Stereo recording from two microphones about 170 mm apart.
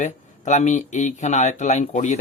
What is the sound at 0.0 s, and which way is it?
Speech, 45° left (ahead or behind).